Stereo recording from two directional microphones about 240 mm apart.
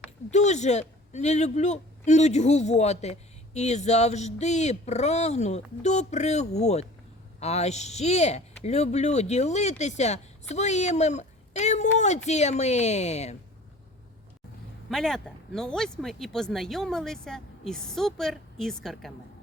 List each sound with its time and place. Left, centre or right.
0.3 s speech: left
14.8 s speech: centre